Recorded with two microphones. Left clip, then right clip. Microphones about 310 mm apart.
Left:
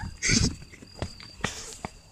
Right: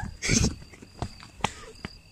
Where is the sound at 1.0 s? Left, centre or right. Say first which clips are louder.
Right 2 dB; centre.